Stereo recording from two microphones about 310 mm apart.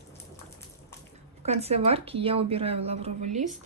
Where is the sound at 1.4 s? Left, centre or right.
Centre.